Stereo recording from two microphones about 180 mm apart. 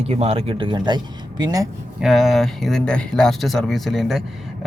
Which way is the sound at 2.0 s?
Centre (ahead or behind).